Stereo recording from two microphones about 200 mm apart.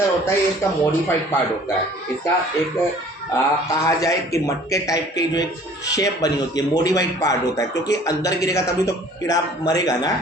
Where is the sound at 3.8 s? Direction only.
15° left (ahead or behind).